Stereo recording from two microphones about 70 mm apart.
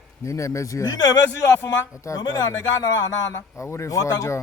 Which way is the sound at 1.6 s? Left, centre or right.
Left.